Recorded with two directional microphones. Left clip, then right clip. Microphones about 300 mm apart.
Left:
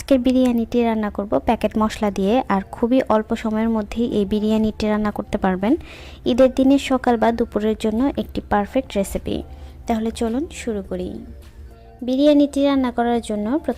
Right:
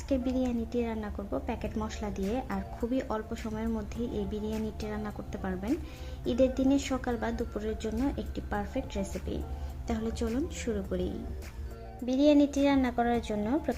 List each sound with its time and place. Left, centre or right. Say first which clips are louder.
0.1 s speech: left 14 dB; left